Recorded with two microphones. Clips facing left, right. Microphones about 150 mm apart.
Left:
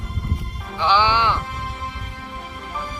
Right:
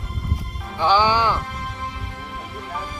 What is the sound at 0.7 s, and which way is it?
Speech, 45° right (ahead or behind).